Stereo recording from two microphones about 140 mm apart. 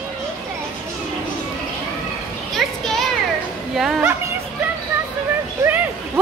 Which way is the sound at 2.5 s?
Centre (ahead or behind).